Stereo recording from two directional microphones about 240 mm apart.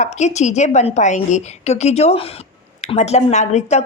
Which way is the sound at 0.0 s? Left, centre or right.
Left.